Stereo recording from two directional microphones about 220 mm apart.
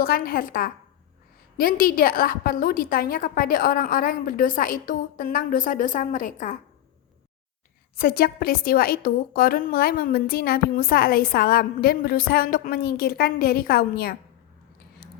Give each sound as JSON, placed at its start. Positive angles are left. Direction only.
{"t": 0.0, "sound": "a woman's voice", "side_deg": 40}
{"t": 7.9, "sound": "a woman's voice", "side_deg": 45}